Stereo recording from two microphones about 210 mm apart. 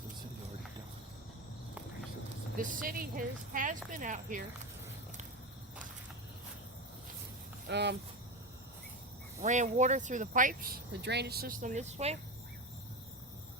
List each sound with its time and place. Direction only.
2.8 s speech: 40° right (ahead or behind)
7.7 s speech: 55° right (ahead or behind)
9.4 s speech: 35° right (ahead or behind)